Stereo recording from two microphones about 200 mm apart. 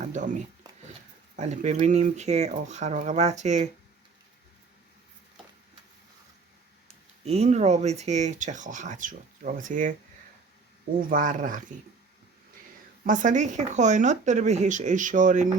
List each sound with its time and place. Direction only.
0.0 s a sound: 40° right (ahead or behind)
1.4 s speech: 35° right (ahead or behind)
7.3 s speech: 35° right (ahead or behind)
11.1 s speech: 40° right (ahead or behind)
13.1 s speech: 40° right (ahead or behind)